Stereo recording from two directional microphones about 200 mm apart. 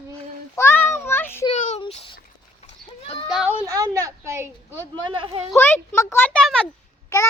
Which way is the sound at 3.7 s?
15° right (ahead or behind).